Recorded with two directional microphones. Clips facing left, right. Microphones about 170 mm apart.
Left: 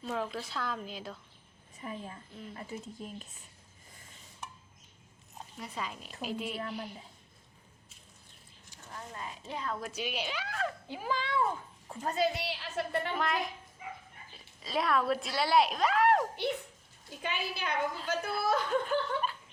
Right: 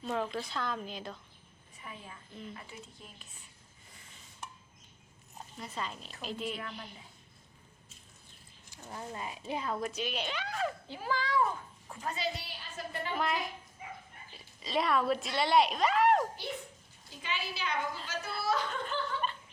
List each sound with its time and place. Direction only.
0.0 s speech: 5° left (ahead or behind)
1.8 s speech: 40° left (ahead or behind)
5.5 s speech: 10° left (ahead or behind)
8.8 s speech: 15° right (ahead or behind)
9.9 s speech: 10° left (ahead or behind)
10.8 s speech: 15° left (ahead or behind)
12.0 s a child's voice: 45° left (ahead or behind)
12.3 s a woman's voice: 75° left (ahead or behind)
13.1 s speech: centre (ahead or behind)
14.6 s speech: centre (ahead or behind)
17.1 s a child's voice: 50° left (ahead or behind)
18.9 s chuckle: 5° left (ahead or behind)